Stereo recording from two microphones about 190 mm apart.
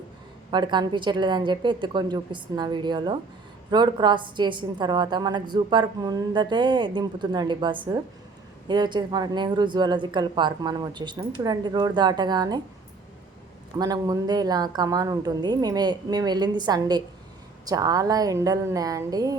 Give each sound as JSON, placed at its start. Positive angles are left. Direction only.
{"t": 0.5, "sound": "a woman's voice", "side_deg": -25}
{"t": 13.7, "sound": "a woman's voice", "side_deg": -20}